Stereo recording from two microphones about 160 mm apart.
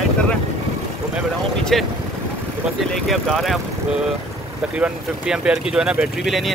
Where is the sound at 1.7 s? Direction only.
Centre (ahead or behind).